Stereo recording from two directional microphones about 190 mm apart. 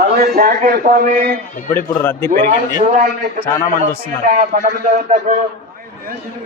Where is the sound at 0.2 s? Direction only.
50° right (ahead or behind).